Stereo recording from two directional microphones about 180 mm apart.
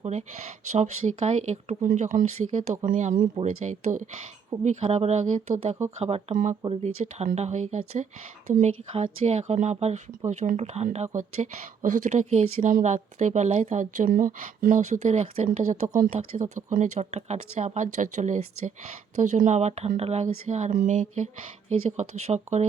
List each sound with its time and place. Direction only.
0.0 s speech: 35° right (ahead or behind)